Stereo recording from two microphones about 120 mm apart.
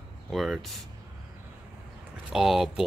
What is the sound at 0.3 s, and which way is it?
Speech, centre (ahead or behind).